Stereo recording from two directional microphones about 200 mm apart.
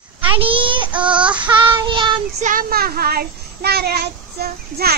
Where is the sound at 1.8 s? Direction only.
25° right (ahead or behind).